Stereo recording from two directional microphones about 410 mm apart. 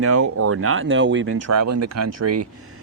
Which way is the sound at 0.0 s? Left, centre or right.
Right.